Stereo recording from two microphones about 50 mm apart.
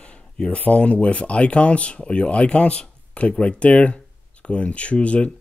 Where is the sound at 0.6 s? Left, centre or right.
Left.